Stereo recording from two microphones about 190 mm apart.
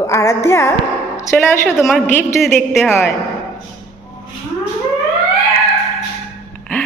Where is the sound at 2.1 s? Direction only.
10° left (ahead or behind).